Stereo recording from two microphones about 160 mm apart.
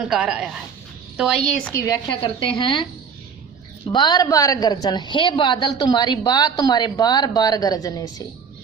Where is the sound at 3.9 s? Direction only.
25° left (ahead or behind).